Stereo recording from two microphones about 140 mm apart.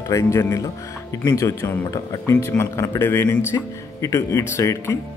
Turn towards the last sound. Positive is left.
turn(degrees=20)  # may be behind; listen again after turning